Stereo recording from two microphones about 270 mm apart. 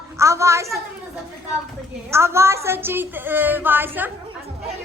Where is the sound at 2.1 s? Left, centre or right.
Centre.